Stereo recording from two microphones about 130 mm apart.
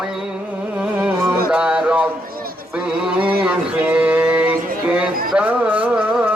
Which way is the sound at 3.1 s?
10° right (ahead or behind).